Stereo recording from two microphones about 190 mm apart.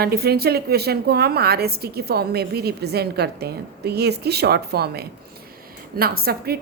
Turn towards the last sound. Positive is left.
turn(degrees=-55)  # may be behind; listen again after turning